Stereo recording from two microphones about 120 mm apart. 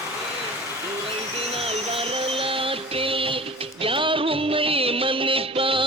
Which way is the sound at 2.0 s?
50° right (ahead or behind).